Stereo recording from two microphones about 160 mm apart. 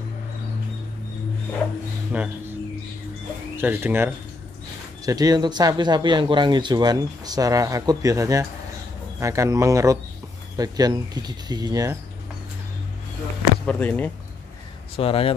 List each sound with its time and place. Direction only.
2.1 s speech: 10° right (ahead or behind)
3.5 s speech: 15° right (ahead or behind)
13.7 s speech: 10° left (ahead or behind)
15.0 s speech: 35° left (ahead or behind)